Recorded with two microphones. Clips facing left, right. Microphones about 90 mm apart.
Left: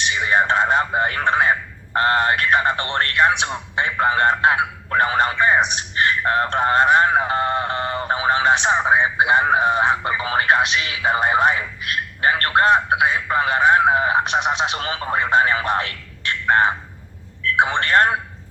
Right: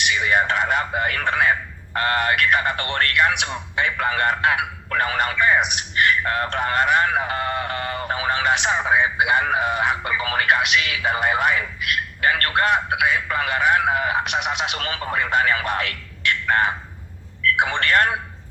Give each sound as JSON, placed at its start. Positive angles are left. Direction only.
{"t": 0.0, "sound": "a man's voice", "side_deg": 30}